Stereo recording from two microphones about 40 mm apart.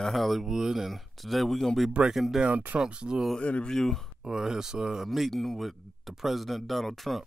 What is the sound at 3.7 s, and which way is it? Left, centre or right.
Speech, centre.